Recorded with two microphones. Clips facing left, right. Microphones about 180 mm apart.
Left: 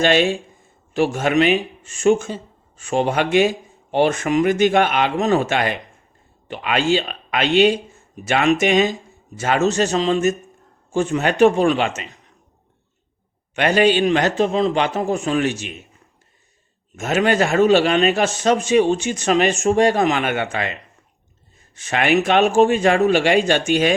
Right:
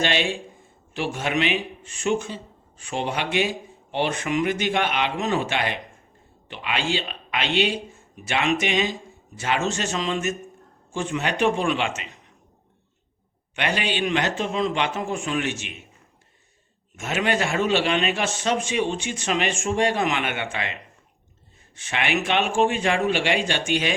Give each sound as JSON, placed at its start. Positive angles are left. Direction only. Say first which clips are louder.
{"t": 0.0, "sound": "a man's voice", "louder": "left 8 dB", "side_deg": 45}
{"t": 13.6, "sound": "a man's voice", "louder": "left 10 dB", "side_deg": 45}
{"t": 17.0, "sound": "a man's voice", "louder": "left 6 dB", "side_deg": 40}
{"t": 21.8, "sound": "speech", "louder": "left 8 dB", "side_deg": 40}